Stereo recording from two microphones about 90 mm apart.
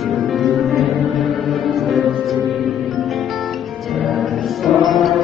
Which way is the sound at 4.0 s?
Centre (ahead or behind).